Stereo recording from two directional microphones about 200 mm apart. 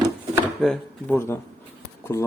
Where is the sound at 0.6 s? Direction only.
5° left (ahead or behind).